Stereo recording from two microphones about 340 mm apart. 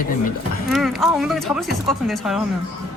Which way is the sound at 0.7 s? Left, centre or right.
Centre.